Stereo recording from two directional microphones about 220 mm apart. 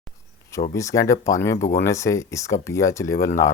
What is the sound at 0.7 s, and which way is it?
Speech, 15° left (ahead or behind).